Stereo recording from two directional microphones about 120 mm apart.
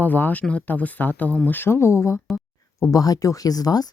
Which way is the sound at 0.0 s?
15° left (ahead or behind).